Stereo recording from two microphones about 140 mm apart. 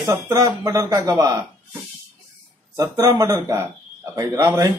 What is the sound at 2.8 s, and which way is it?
Speech, 25° right (ahead or behind).